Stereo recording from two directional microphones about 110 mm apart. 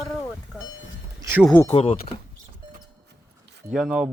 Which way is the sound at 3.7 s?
5° right (ahead or behind).